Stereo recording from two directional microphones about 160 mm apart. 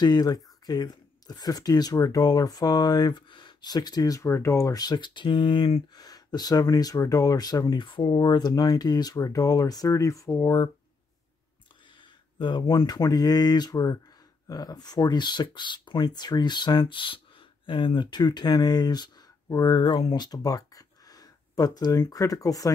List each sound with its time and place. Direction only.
0.0 s speech: 25° left (ahead or behind)
11.9 s speech: 30° left (ahead or behind)